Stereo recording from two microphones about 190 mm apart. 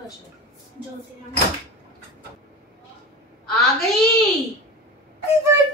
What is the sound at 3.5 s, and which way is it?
Speech, centre (ahead or behind).